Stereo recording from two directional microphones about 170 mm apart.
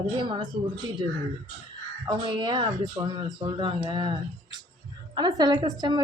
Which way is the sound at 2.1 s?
25° right (ahead or behind).